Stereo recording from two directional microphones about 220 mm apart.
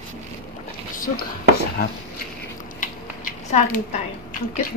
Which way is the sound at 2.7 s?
35° left (ahead or behind).